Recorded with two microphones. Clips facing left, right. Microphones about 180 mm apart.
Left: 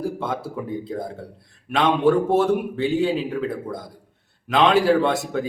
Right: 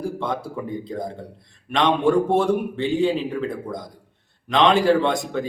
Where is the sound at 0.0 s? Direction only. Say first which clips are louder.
Even; 5° left (ahead or behind).